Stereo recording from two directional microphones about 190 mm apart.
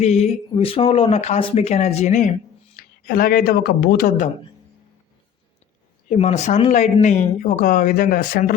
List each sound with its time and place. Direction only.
0.0 s speech: 35° left (ahead or behind)
3.1 s speech: 50° left (ahead or behind)
6.1 s speech: 35° left (ahead or behind)